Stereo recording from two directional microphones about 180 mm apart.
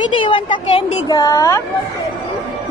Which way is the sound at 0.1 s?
25° left (ahead or behind).